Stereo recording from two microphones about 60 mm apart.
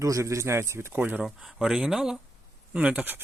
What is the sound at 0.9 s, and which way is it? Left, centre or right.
Speech, right.